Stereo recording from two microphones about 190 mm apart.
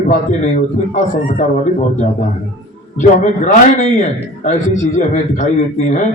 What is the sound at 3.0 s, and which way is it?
A man's voice, 40° left (ahead or behind).